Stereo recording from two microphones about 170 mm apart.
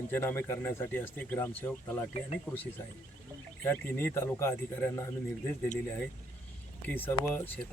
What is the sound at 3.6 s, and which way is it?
Speech, 10° left (ahead or behind).